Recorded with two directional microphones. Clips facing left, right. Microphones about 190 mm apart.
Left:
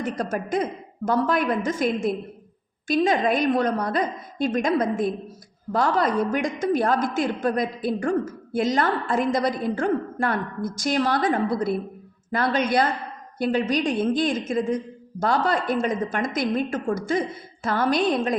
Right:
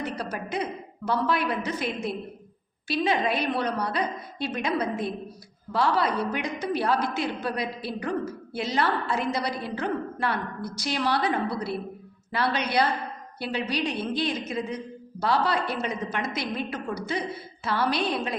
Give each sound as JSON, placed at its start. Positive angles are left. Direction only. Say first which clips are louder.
{"t": 0.0, "sound": "a woman's voice", "louder": "left 5 dB", "side_deg": 50}